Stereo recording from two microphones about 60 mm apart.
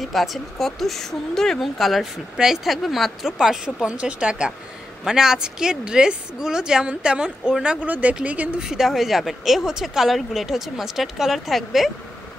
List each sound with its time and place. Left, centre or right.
0.0 s a woman's voice: centre
7.8 s speech: right
8.5 s speech: centre